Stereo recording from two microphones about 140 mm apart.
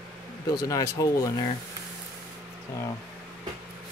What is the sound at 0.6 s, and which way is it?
Speech, 25° left (ahead or behind).